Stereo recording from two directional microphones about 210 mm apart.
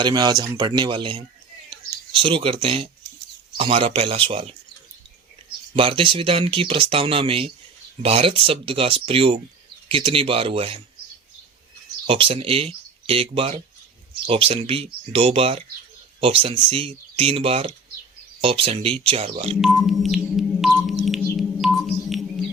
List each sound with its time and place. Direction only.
0.0 s speech: 20° right (ahead or behind)
5.7 s speech: 25° right (ahead or behind)
12.0 s speech: 25° right (ahead or behind)
19.5 s chirp tone: centre (ahead or behind)
21.3 s a sound: centre (ahead or behind)